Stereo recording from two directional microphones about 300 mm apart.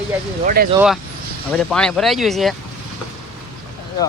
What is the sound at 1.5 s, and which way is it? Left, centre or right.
Speech, centre.